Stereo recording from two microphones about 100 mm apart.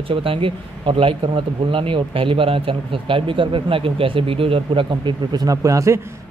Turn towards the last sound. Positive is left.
turn(degrees=-30)  # may be behind; listen again after turning